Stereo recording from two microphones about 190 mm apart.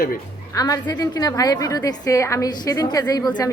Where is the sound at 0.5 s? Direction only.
20° left (ahead or behind).